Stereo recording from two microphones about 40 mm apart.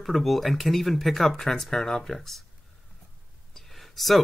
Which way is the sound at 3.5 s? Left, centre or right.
Centre.